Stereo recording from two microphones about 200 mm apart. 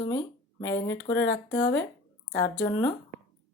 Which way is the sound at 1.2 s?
60° left (ahead or behind).